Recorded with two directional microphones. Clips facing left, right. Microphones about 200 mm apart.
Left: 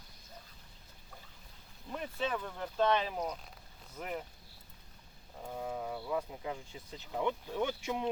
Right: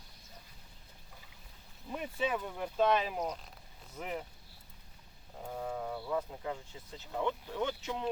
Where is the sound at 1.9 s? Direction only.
5° right (ahead or behind).